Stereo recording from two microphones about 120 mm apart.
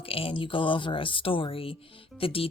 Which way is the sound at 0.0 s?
50° left (ahead or behind).